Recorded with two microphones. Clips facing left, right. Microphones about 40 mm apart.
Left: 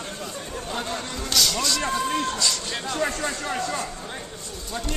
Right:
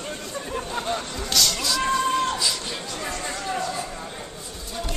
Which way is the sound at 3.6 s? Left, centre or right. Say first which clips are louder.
Even; centre.